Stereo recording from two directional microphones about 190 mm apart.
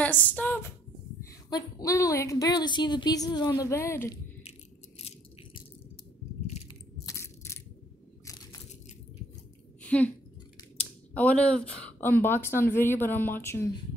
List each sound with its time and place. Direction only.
0.0 s a sound: 10° left (ahead or behind)
1.5 s a woman's voice: 20° left (ahead or behind)
4.5 s rattle: 35° left (ahead or behind)
7.1 s crushing: 15° left (ahead or behind)
9.8 s a woman's voice: 5° left (ahead or behind)